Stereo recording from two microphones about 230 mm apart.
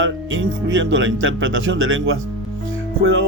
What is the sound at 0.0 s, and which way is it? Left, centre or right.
Music, right.